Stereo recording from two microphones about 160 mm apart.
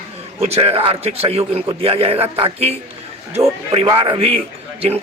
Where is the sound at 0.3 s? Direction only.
40° right (ahead or behind).